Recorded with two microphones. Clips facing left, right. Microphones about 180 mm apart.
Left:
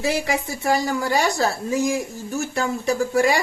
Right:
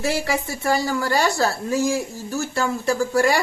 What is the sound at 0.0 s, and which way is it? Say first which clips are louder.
Speech: even; 20° left (ahead or behind).